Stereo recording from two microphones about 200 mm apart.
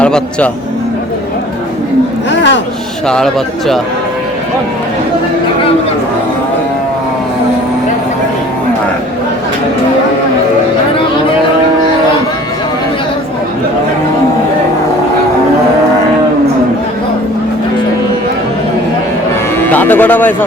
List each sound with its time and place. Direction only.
0.0 s a man's voice: 5° left (ahead or behind)
2.3 s a sound: 60° left (ahead or behind)
3.1 s speech: centre (ahead or behind)
19.5 s music: 10° left (ahead or behind)